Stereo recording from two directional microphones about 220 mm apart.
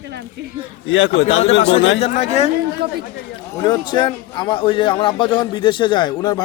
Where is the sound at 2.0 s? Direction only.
30° left (ahead or behind).